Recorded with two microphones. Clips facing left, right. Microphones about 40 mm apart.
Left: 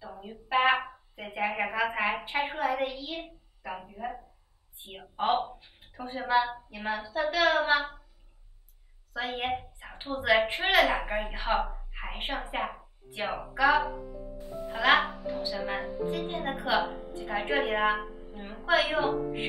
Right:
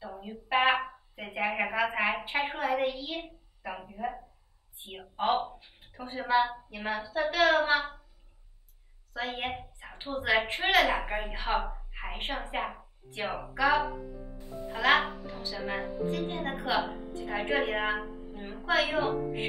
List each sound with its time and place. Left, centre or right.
0.1 s music: centre
0.7 s a sound: centre
4.8 s a woman's voice: centre
9.1 s a woman's voice: centre